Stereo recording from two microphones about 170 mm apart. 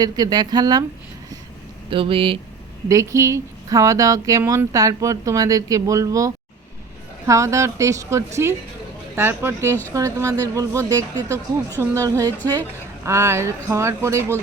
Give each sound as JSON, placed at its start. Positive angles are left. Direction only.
{"t": 0.0, "sound": "speech", "side_deg": -20}
{"t": 1.9, "sound": "speech", "side_deg": -30}
{"t": 2.9, "sound": "speech", "side_deg": -20}